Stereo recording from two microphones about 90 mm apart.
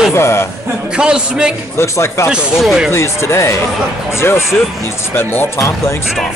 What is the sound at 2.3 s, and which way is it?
Speech, 5° right (ahead or behind).